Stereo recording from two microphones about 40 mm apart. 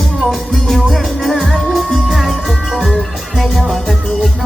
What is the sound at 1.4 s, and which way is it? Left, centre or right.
Music, centre.